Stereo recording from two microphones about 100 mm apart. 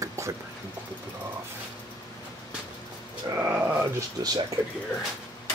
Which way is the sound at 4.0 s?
40° right (ahead or behind).